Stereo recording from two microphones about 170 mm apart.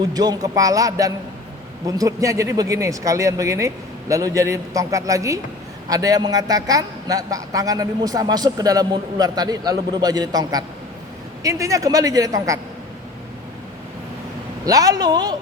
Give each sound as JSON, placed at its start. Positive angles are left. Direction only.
{"t": 0.0, "sound": "a man's voice", "side_deg": -25}
{"t": 14.6, "sound": "a man's voice", "side_deg": -20}